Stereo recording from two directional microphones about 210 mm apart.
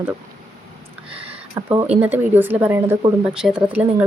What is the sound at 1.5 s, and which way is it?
Speech, 20° right (ahead or behind).